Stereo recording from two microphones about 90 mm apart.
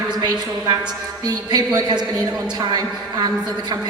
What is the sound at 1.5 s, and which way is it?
Speech, 50° right (ahead or behind).